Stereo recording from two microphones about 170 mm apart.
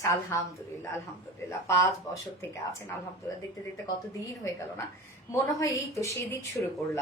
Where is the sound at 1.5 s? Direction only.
15° left (ahead or behind).